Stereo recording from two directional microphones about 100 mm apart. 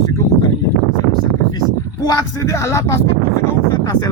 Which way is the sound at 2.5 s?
30° left (ahead or behind).